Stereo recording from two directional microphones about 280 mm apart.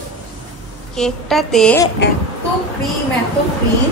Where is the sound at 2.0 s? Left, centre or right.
Left.